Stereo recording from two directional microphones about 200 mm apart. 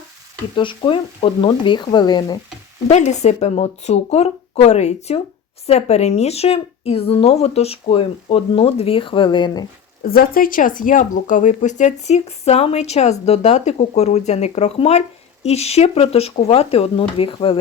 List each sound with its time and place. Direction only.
0.5 s speech: 25° left (ahead or behind)
2.8 s speech: 35° left (ahead or behind)
10.0 s speech: 45° left (ahead or behind); by 17.6 s 25° left (ahead or behind)